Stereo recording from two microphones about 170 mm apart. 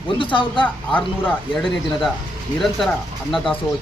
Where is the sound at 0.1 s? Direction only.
30° left (ahead or behind).